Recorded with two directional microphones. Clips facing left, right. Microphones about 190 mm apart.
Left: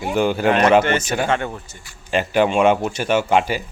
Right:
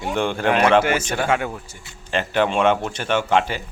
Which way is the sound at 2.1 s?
10° left (ahead or behind).